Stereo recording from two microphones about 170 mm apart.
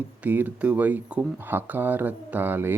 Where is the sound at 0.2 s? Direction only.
10° right (ahead or behind).